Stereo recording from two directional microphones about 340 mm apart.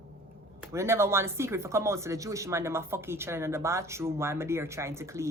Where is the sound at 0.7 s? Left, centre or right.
Centre.